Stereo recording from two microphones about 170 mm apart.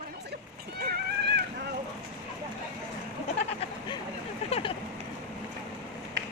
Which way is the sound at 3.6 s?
25° left (ahead or behind).